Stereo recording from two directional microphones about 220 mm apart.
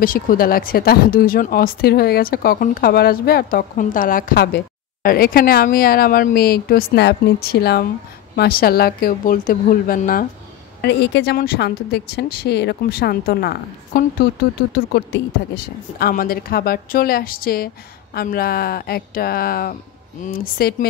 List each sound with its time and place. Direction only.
0.0 s a woman's voice: 40° left (ahead or behind)